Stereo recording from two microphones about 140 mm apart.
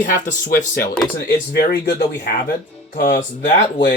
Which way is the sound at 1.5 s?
90° left.